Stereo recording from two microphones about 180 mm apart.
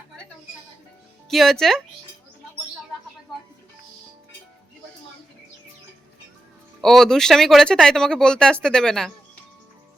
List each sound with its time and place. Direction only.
1.3 s speech: centre (ahead or behind)
6.8 s speech: centre (ahead or behind)